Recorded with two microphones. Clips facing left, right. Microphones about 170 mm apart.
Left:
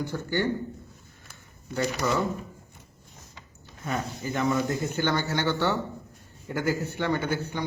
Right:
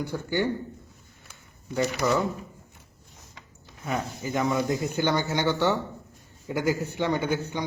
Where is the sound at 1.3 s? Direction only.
10° right (ahead or behind).